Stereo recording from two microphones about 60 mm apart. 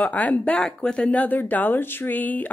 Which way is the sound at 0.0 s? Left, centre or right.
Left.